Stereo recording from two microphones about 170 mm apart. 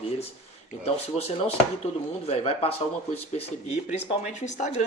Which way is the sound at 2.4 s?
35° left (ahead or behind).